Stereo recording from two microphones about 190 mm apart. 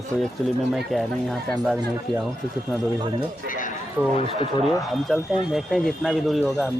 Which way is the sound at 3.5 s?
45° left (ahead or behind).